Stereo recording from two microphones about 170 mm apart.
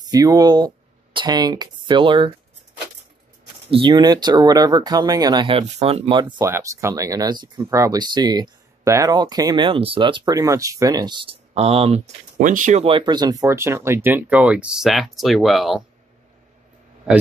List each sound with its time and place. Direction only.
0.1 s speech: 20° right (ahead or behind)
3.7 s speech: 25° right (ahead or behind)
6.3 s speech: 15° right (ahead or behind); by 12.8 s 50° right (ahead or behind)
12.8 s speech: 30° right (ahead or behind); by 15.8 s centre (ahead or behind)